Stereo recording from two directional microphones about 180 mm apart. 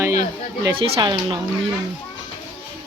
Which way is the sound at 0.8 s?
30° right (ahead or behind).